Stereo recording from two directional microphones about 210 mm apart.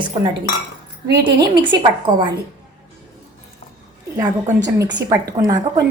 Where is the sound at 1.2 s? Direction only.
20° right (ahead or behind).